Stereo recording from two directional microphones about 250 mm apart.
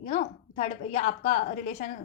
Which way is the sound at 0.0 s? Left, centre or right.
Left.